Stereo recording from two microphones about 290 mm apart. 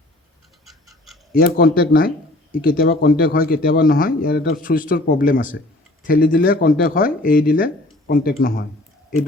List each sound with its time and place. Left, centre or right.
0.6 s frog: centre
1.3 s speech: left